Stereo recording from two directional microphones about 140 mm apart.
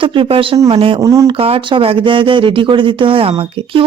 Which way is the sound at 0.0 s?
40° right (ahead or behind).